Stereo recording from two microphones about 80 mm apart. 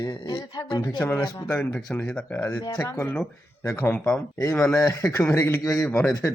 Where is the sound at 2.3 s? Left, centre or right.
Left.